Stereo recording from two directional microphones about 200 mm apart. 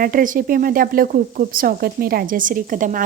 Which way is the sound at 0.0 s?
45° right (ahead or behind).